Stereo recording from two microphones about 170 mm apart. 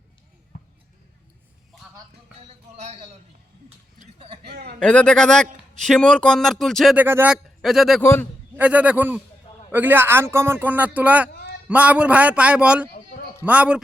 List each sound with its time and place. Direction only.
2.5 s speech: 40° right (ahead or behind)
4.4 s speech: 70° right (ahead or behind)
4.8 s speech: 5° left (ahead or behind)
6.9 s a man's voice: 10° right (ahead or behind)
8.0 s a man's voice: 15° left (ahead or behind)
8.5 s a man's voice: 10° right (ahead or behind)